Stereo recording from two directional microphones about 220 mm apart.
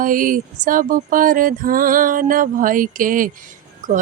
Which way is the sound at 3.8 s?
35° right (ahead or behind).